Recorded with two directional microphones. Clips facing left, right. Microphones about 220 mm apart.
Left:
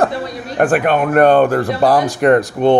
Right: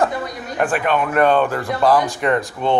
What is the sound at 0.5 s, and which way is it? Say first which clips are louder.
Speech: left 5 dB; 50° left (ahead or behind).